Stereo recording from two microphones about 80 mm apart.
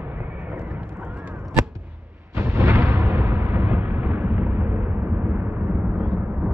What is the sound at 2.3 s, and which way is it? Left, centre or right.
Explosion, right.